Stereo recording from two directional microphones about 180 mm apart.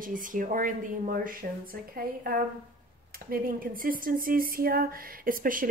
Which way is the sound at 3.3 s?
55° right (ahead or behind).